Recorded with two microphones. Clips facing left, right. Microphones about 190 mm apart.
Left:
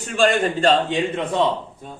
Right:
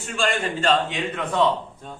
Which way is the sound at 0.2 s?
35° left (ahead or behind).